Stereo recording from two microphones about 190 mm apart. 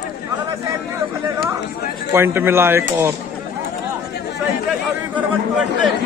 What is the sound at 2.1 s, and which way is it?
Speech, 10° right (ahead or behind).